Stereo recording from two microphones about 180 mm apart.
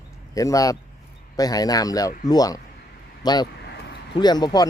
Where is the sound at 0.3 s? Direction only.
20° left (ahead or behind).